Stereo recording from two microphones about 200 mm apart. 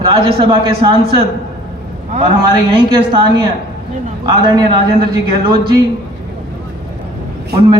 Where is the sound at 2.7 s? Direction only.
25° right (ahead or behind).